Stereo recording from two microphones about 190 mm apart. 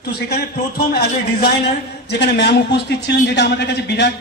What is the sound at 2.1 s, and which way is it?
A man's voice, 60° left (ahead or behind).